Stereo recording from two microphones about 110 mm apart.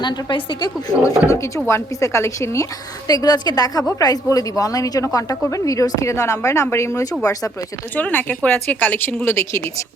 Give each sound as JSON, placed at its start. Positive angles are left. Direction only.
{"t": 0.0, "sound": "speech", "side_deg": 45}
{"t": 3.1, "sound": "speech", "side_deg": 35}
{"t": 7.9, "sound": "speech", "side_deg": 15}